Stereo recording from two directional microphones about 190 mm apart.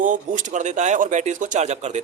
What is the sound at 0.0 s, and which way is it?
Speech, 45° right (ahead or behind).